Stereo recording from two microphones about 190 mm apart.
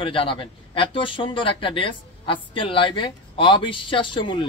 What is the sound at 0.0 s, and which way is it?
A man's voice, 25° left (ahead or behind).